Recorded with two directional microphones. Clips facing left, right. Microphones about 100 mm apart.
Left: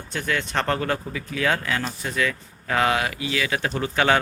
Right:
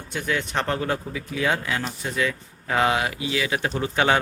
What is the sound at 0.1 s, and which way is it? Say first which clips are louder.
Speech: even; 15° right (ahead or behind).